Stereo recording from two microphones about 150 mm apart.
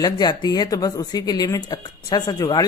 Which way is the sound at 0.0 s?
25° left (ahead or behind).